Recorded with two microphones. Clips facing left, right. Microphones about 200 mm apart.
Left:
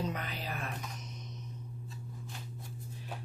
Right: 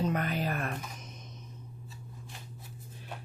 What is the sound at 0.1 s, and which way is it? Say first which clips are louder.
Music: right 8 dB; 55° right (ahead or behind).